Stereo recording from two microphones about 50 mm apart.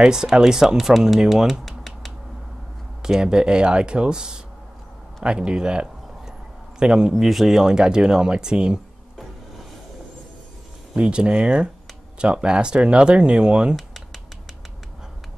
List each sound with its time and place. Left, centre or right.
0.0 s speech: centre
1.0 s a sound: centre
3.0 s speech: centre
5.2 s a sound: centre
6.8 s speech: centre
11.0 s speech: right